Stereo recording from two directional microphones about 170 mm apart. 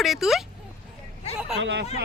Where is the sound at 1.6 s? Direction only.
90° right.